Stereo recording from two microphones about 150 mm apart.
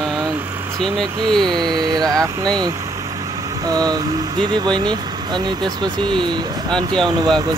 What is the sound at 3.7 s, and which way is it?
Speech, 25° right (ahead or behind).